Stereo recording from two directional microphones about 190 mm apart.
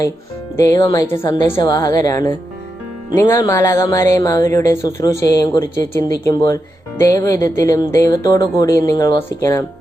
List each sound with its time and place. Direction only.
0.5 s a woman's voice: 15° left (ahead or behind)